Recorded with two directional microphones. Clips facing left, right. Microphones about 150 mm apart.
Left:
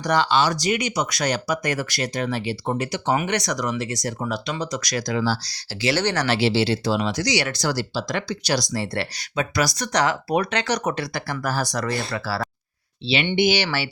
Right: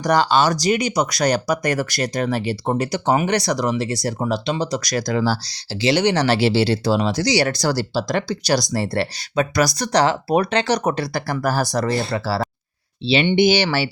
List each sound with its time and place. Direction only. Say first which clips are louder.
0.0 s speech: right 3 dB; 40° right (ahead or behind)
5.4 s speech: right 4 dB; 25° right (ahead or behind)
6.1 s speech: right 3 dB; 35° right (ahead or behind)